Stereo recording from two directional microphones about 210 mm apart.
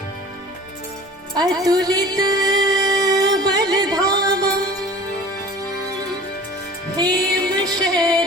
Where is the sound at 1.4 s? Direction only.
20° right (ahead or behind).